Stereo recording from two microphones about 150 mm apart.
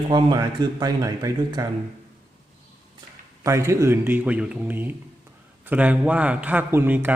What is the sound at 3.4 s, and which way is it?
Speech, 20° right (ahead or behind).